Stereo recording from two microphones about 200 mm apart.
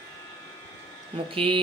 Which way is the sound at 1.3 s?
25° right (ahead or behind).